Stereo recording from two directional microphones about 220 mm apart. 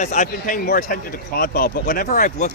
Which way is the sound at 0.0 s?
35° left (ahead or behind).